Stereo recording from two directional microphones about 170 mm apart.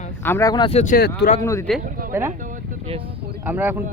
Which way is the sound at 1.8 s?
55° right (ahead or behind).